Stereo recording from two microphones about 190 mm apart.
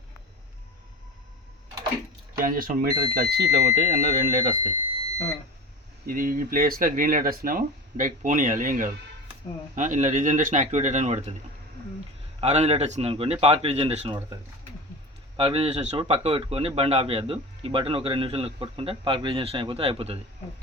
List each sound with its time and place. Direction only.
2.4 s speech: 45° right (ahead or behind)
6.1 s a man's voice: 45° right (ahead or behind)
12.4 s a man's voice: 35° right (ahead or behind)
15.4 s a man's voice: 30° right (ahead or behind)